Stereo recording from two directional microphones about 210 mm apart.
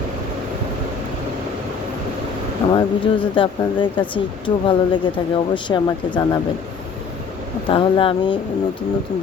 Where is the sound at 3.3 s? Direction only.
25° left (ahead or behind).